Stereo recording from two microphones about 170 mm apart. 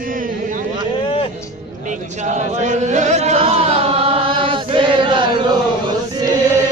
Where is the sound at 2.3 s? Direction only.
45° right (ahead or behind); by 5.2 s 30° right (ahead or behind).